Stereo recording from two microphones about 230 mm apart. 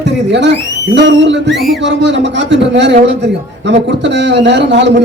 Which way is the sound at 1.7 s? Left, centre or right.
Right.